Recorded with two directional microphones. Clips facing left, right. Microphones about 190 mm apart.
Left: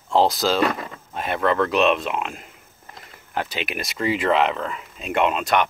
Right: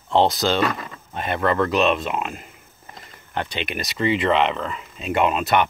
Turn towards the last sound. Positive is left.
turn(degrees=0)  # may be behind; listen again after turning